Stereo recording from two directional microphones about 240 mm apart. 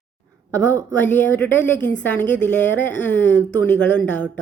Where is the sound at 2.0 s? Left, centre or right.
Centre.